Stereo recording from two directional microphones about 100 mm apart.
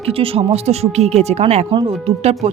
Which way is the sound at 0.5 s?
90° right.